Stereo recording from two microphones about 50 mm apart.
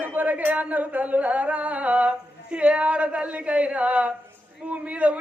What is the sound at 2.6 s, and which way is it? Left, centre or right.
Speech, right.